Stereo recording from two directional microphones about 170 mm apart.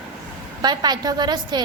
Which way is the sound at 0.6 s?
25° right (ahead or behind).